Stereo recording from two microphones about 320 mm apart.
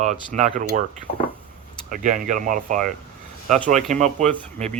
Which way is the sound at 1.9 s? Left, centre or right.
Right.